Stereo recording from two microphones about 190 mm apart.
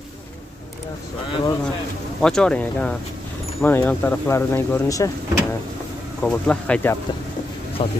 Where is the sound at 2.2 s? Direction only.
5° left (ahead or behind).